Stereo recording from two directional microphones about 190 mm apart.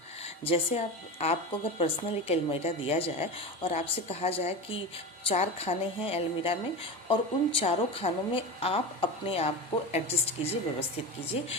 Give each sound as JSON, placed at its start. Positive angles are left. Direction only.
{"t": 0.4, "sound": "a woman's voice", "side_deg": 30}